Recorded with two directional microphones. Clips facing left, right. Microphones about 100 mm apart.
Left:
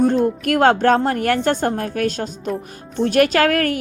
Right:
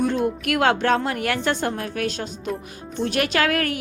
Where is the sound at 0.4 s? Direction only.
40° left (ahead or behind).